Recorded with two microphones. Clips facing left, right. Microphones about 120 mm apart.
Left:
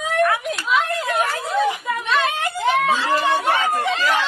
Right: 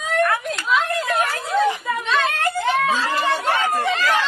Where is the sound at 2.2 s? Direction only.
15° left (ahead or behind).